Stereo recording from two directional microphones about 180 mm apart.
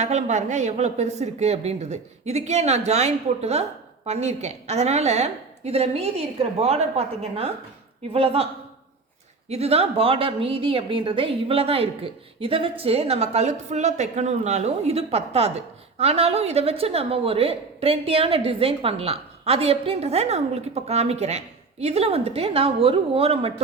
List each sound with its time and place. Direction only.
0.0 s a woman's voice: 40° right (ahead or behind)
9.5 s a woman's voice: 35° right (ahead or behind)